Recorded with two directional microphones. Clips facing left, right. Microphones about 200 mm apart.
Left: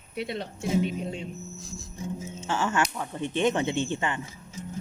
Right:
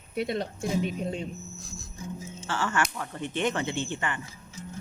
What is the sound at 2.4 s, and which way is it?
A woman's voice, 20° left (ahead or behind).